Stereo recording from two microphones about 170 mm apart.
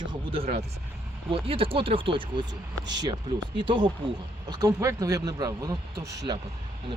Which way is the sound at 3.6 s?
25° right (ahead or behind).